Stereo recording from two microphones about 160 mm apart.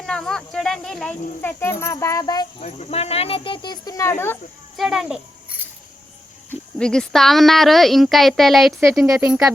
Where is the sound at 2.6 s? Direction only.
40° left (ahead or behind); by 4.3 s 15° left (ahead or behind).